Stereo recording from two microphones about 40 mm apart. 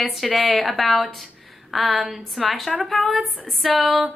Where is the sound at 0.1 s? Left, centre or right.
Centre.